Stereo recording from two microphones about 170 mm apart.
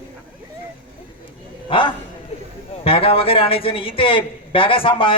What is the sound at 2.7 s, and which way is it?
A man's voice, 35° left (ahead or behind).